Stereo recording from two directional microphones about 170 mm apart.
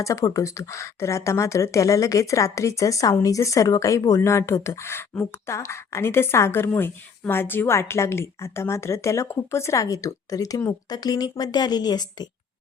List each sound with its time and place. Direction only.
0.0 s speech: 20° left (ahead or behind)